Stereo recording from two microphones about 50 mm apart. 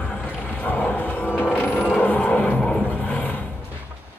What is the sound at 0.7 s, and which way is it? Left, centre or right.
Music, left.